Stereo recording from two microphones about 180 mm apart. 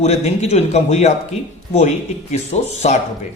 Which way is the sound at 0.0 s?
35° left (ahead or behind).